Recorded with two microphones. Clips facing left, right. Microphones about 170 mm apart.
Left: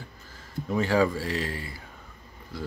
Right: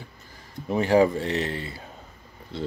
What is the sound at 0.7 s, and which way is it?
Speech, 20° right (ahead or behind).